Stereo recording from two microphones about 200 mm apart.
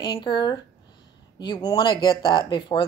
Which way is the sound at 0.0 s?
20° left (ahead or behind).